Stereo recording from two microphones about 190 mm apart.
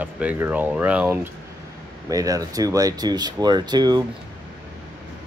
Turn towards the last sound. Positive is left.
turn(degrees=-20)  # may be behind; listen again after turning